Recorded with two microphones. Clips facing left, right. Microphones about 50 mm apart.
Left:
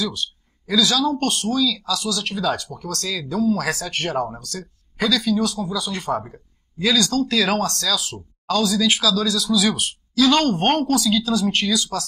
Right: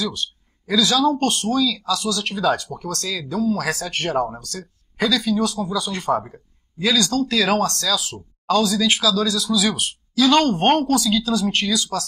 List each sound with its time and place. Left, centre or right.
0.7 s speech: centre
8.5 s speech: right
9.3 s speech: centre